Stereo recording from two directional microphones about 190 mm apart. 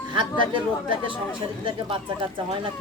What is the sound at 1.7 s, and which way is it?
Speech, 25° right (ahead or behind).